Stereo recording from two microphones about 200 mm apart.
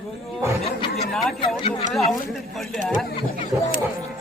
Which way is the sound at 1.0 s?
Centre (ahead or behind).